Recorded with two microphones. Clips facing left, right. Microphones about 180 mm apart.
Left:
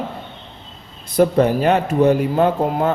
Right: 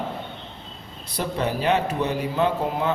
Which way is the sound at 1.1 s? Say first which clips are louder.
Left 11 dB; 50° left (ahead or behind).